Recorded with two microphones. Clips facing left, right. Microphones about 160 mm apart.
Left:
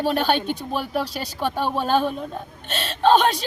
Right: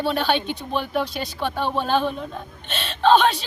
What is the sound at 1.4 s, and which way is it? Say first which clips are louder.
Speech: left 1 dB; 10° left (ahead or behind).